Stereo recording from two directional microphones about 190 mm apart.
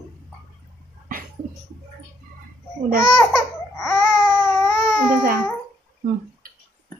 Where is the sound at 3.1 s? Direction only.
15° left (ahead or behind).